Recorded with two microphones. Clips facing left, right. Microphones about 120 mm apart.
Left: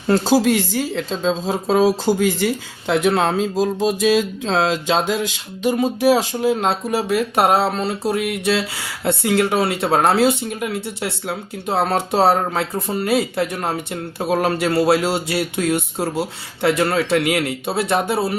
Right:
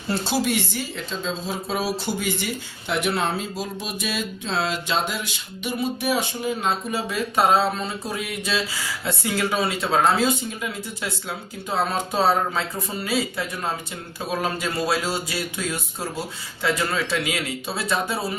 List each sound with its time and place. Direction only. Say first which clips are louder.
0.4 s speech: left 7 dB; 90° left; by 18.3 s 65° left (ahead or behind)